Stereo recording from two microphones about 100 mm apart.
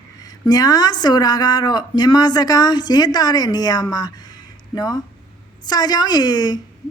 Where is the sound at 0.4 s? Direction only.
40° left (ahead or behind).